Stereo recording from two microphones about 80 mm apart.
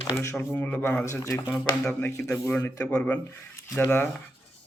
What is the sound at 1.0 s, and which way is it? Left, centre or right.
Speech, left.